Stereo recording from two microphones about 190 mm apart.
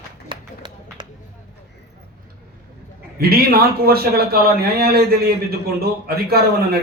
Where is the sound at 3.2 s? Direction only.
55° right (ahead or behind).